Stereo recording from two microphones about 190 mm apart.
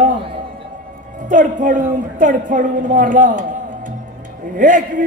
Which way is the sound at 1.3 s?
45° right (ahead or behind).